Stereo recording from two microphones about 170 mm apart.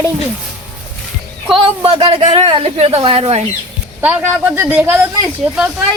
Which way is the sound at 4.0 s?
10° right (ahead or behind).